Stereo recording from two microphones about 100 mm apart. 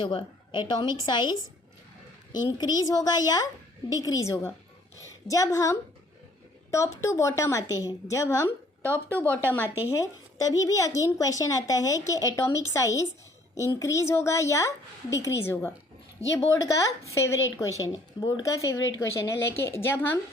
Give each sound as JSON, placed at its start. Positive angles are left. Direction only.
{"t": 0.0, "sound": "a woman's voice", "side_deg": 50}
{"t": 9.3, "sound": "a woman's voice", "side_deg": 20}
{"t": 9.6, "sound": "speech", "side_deg": -20}
{"t": 9.9, "sound": "a woman's voice", "side_deg": 35}